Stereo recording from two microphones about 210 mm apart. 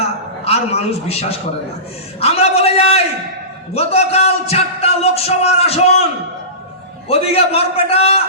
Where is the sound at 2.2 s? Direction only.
30° left (ahead or behind).